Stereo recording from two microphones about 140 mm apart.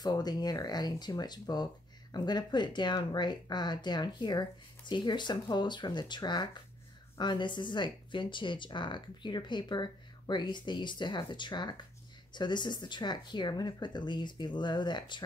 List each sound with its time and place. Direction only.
0.0 s speech: 30° left (ahead or behind)